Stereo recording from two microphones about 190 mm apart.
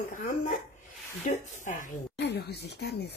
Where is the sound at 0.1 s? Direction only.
45° left (ahead or behind).